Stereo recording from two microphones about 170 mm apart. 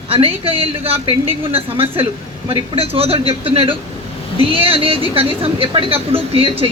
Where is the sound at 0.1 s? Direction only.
35° right (ahead or behind).